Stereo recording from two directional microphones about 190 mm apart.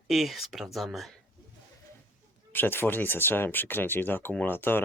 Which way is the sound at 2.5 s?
10° left (ahead or behind).